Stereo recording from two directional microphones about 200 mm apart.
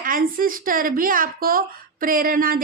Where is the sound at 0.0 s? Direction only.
45° right (ahead or behind).